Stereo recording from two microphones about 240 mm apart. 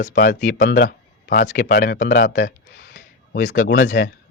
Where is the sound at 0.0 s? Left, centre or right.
Left.